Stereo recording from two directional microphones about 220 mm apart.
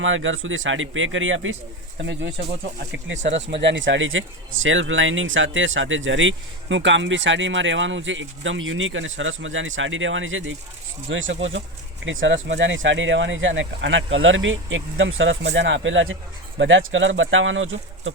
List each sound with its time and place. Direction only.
0.0 s speech: 60° right (ahead or behind)
3.2 s speech: 55° right (ahead or behind)